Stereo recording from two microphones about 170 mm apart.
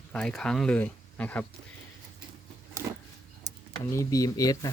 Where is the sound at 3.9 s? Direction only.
20° left (ahead or behind).